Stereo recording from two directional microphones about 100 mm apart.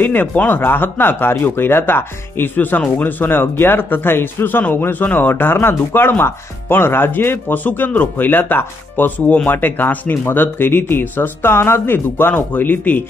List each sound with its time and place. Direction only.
0.0 s speech: 20° left (ahead or behind)